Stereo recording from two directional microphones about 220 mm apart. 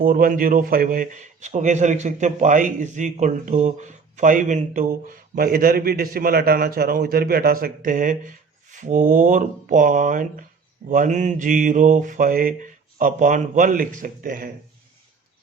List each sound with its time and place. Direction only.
0.0 s a man's voice: 40° right (ahead or behind)